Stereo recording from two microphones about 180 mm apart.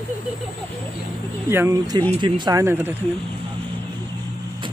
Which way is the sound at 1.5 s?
15° right (ahead or behind).